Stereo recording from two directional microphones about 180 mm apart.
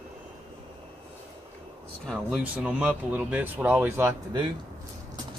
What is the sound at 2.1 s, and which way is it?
Speech, 5° right (ahead or behind).